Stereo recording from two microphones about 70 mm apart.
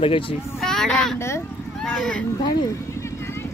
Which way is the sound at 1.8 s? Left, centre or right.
Centre.